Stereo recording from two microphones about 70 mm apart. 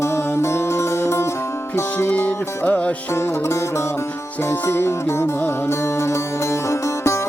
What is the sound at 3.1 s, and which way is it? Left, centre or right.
Music, left.